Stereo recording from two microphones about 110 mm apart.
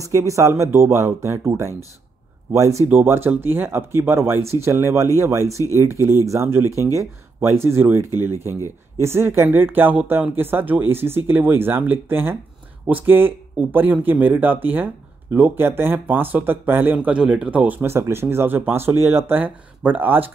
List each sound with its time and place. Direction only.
0.0 s speech: 30° right (ahead or behind)
2.9 s speech: 20° right (ahead or behind)
8.5 s speech: 30° left (ahead or behind)
9.0 s speech: 25° right (ahead or behind)